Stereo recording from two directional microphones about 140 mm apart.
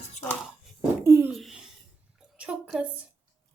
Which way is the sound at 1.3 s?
Centre (ahead or behind).